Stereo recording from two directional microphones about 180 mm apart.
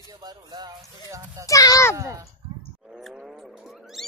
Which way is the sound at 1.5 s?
20° left (ahead or behind).